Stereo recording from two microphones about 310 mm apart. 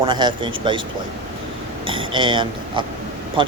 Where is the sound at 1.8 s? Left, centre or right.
Centre.